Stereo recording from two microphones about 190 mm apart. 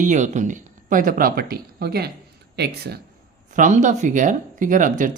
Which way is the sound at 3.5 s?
40° right (ahead or behind).